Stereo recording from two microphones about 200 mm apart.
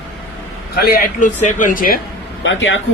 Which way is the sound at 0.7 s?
50° left (ahead or behind).